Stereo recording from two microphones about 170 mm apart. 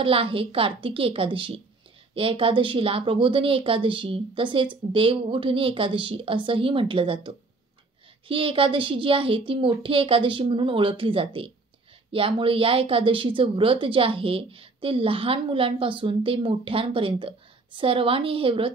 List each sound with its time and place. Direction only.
0.0 s a woman's voice: 30° right (ahead or behind)